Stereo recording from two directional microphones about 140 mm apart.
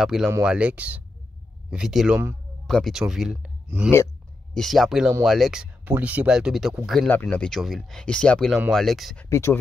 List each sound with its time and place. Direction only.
0.0 s speech: centre (ahead or behind)
7.1 s speech: 15° left (ahead or behind)
9.2 s speech: 20° left (ahead or behind)